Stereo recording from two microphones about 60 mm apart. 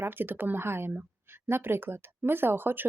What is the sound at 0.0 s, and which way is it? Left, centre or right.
A woman's voice, right.